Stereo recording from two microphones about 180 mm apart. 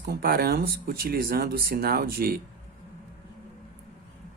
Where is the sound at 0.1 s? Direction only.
55° right (ahead or behind).